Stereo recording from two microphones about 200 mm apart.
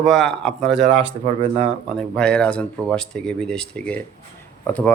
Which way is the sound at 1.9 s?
5° left (ahead or behind).